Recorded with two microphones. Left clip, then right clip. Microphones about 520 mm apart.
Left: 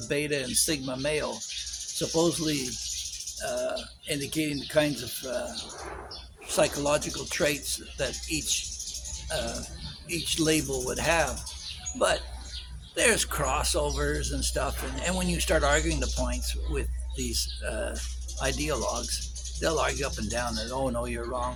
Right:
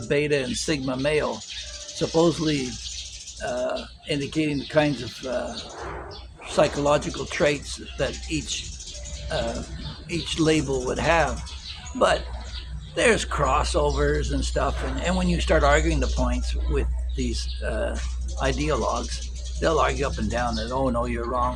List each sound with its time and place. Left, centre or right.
0.1 s speech: left
6.5 s speech: left
10.1 s speech: left